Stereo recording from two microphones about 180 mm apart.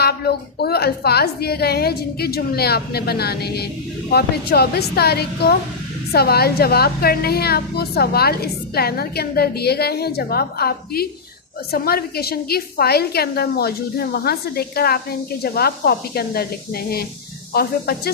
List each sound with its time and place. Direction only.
0.0 s a woman's voice: 60° left (ahead or behind)